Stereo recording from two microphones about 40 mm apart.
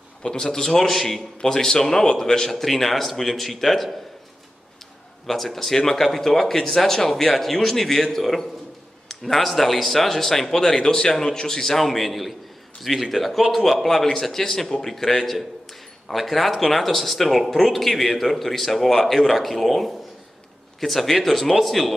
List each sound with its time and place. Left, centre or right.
0.2 s speech: centre
1.4 s speech: centre
2.5 s speech: centre
5.2 s speech: centre